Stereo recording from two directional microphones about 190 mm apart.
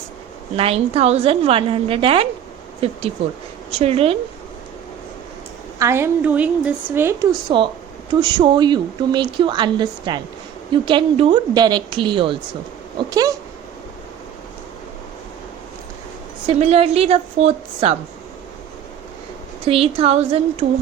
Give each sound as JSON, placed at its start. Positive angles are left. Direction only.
{"t": 0.5, "sound": "a woman's voice", "side_deg": -30}
{"t": 5.8, "sound": "a woman's voice", "side_deg": -15}
{"t": 7.5, "sound": "a woman's voice", "side_deg": -25}
{"t": 16.5, "sound": "a woman's voice", "side_deg": -35}
{"t": 19.6, "sound": "a woman's voice", "side_deg": -30}